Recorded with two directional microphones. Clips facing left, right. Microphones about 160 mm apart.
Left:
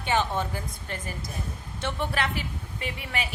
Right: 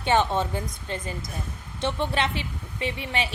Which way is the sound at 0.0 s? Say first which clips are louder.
Right 4 dB; 20° right (ahead or behind).